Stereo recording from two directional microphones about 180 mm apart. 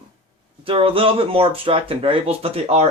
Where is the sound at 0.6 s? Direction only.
30° right (ahead or behind).